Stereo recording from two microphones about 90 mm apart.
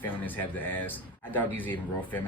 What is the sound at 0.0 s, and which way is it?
Speech, 20° left (ahead or behind).